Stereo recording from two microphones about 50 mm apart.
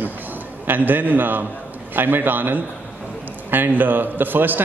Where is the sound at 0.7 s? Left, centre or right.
Right.